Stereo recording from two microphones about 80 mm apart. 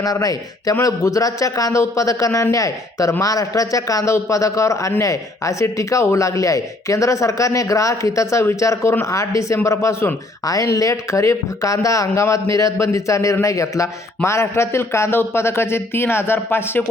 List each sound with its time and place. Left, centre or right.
0.0 s speech: left